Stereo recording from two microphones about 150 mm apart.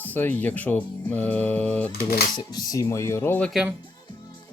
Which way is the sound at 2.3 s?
25° left (ahead or behind).